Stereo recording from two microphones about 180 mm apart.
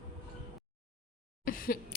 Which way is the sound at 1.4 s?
50° left (ahead or behind).